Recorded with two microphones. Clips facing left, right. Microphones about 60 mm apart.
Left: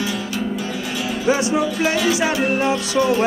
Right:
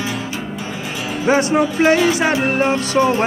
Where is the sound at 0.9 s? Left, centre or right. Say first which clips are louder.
Right 3 dB; right.